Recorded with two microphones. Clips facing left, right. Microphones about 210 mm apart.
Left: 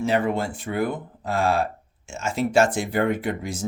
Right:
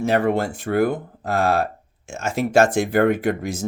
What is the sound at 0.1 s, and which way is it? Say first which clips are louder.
Speech: right 5 dB; 65° right (ahead or behind).